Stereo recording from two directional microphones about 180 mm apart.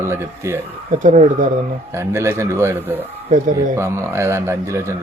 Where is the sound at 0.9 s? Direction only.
45° right (ahead or behind).